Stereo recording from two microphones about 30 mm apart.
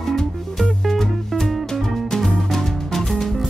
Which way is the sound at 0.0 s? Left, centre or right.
Centre.